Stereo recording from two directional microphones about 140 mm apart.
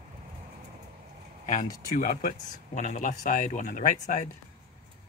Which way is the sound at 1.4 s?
65° left (ahead or behind).